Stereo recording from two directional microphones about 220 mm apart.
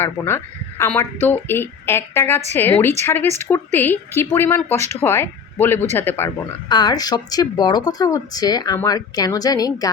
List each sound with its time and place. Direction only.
0.0 s speech: 10° left (ahead or behind)